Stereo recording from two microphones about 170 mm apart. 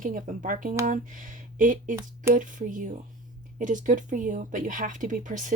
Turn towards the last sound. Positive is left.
turn(degrees=-50)  # may be behind; listen again after turning